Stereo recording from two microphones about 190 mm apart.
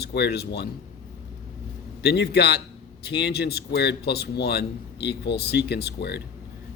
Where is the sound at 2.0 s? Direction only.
60° left (ahead or behind).